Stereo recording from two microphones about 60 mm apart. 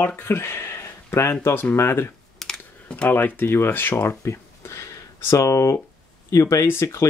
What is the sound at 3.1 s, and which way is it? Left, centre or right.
Speech, left.